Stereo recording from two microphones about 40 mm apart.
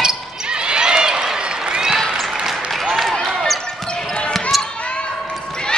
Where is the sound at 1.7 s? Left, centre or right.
Centre.